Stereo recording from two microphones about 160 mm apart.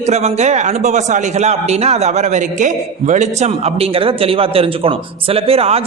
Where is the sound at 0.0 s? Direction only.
45° right (ahead or behind).